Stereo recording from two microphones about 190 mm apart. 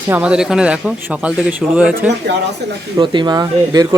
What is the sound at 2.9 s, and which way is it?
Speech, 25° right (ahead or behind).